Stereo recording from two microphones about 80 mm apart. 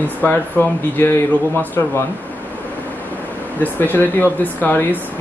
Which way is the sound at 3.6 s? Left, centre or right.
Left.